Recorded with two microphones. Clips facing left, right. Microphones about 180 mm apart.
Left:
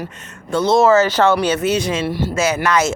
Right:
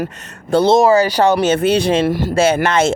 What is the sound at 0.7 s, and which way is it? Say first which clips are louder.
Speech: right 1 dB; 15° right (ahead or behind).